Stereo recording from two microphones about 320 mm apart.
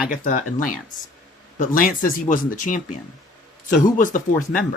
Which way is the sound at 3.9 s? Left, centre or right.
Left.